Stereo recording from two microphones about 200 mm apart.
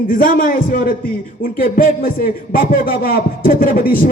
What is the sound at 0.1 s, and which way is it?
Speech, 45° left (ahead or behind).